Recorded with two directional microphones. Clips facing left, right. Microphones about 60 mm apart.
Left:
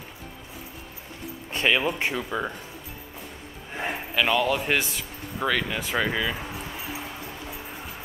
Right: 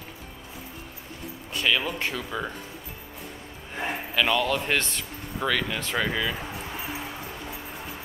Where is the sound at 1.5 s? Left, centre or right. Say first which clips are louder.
Left 2 dB; left.